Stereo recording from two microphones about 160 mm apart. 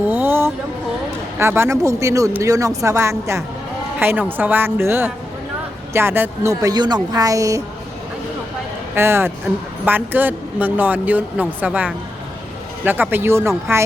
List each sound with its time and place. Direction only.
0.1 s a sound: 15° right (ahead or behind)
1.4 s speech: 15° right (ahead or behind)
9.0 s speech: 15° right (ahead or behind)